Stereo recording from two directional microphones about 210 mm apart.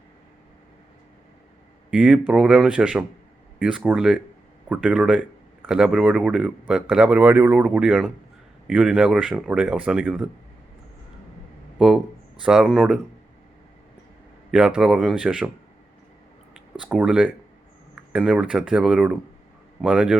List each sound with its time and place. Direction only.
1.9 s speech: 5° right (ahead or behind)
11.8 s speech: 5° right (ahead or behind)
14.5 s speech: 5° right (ahead or behind)
16.7 s speech: 5° right (ahead or behind)